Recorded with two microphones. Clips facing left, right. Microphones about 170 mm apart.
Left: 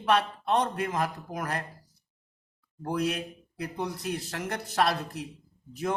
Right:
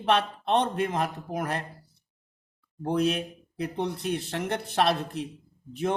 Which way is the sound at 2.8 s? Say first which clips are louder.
Right 4 dB; 25° right (ahead or behind).